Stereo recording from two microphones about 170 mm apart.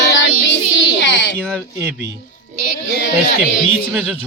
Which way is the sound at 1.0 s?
90° left.